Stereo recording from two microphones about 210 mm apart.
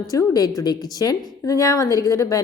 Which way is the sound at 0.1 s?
15° left (ahead or behind).